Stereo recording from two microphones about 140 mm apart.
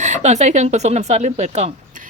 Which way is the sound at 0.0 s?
60° right (ahead or behind).